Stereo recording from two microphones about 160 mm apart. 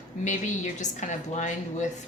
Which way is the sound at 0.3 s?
50° left (ahead or behind).